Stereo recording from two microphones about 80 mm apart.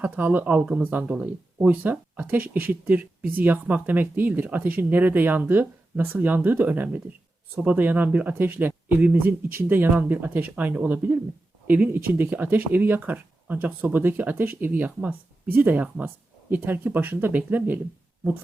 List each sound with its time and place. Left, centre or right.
0.0 s speech: right